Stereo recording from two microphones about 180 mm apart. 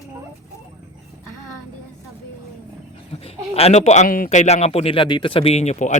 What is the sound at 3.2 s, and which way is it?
A man's voice, 35° left (ahead or behind).